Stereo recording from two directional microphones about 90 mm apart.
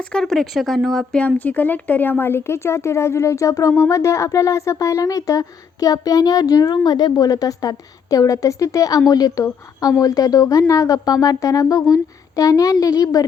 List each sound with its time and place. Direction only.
0.0 s a woman's voice: 10° left (ahead or behind); by 13.2 s 40° left (ahead or behind)